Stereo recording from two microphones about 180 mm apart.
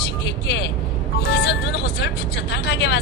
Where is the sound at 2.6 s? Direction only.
70° left (ahead or behind).